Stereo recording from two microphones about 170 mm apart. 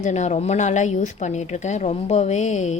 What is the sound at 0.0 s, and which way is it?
A woman's voice, 45° left (ahead or behind).